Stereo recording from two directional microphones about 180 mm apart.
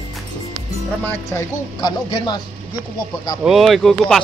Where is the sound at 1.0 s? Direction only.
15° left (ahead or behind).